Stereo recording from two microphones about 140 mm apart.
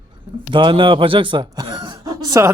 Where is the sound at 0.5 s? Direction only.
35° right (ahead or behind).